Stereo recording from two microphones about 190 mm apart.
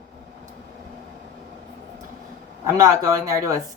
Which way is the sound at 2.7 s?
15° right (ahead or behind).